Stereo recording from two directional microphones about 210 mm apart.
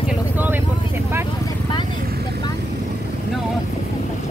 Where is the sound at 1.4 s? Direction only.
20° left (ahead or behind).